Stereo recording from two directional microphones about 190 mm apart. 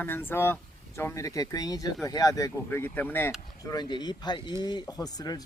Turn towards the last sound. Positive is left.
turn(degrees=20)  # may be behind; listen again after turning